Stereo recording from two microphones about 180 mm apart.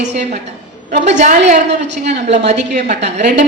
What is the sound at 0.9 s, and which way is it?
A woman's voice, 40° right (ahead or behind).